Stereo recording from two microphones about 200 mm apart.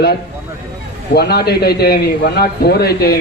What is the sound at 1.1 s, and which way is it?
A man's voice, 55° left (ahead or behind).